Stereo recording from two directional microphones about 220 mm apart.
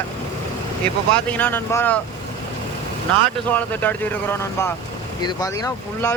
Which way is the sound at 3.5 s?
10° left (ahead or behind).